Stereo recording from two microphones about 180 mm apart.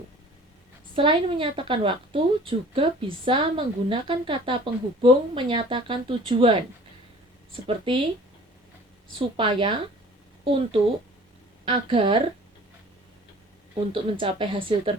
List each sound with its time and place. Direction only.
0.9 s a woman's voice: 30° right (ahead or behind)
9.1 s a woman's voice: 30° right (ahead or behind)
13.9 s a woman's voice: 30° right (ahead or behind)